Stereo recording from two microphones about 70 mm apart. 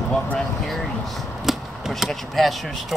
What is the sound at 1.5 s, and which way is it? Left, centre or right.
Speech, centre.